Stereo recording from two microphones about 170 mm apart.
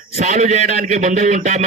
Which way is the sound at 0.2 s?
45° right (ahead or behind).